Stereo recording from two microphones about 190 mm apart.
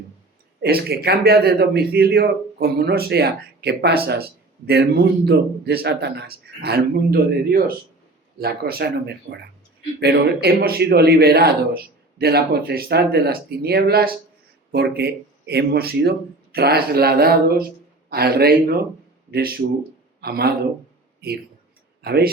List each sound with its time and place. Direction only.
0.6 s a man's voice: 55° right (ahead or behind)
22.0 s speech: 55° right (ahead or behind)